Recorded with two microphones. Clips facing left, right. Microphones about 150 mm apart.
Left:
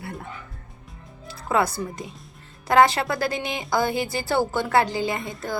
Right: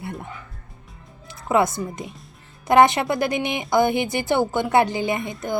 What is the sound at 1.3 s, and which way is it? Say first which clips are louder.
A woman's voice: right 3 dB; 20° right (ahead or behind).